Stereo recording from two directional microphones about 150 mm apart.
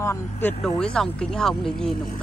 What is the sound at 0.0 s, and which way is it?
Speech, 15° left (ahead or behind).